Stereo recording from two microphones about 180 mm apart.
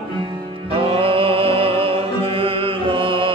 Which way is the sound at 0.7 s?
30° right (ahead or behind).